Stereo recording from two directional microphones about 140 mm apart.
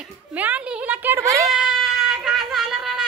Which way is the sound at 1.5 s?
5° right (ahead or behind).